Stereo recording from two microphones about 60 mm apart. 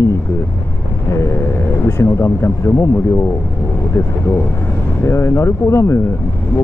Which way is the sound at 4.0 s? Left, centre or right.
Left.